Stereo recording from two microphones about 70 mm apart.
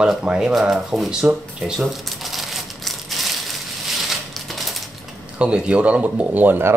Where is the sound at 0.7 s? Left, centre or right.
Centre.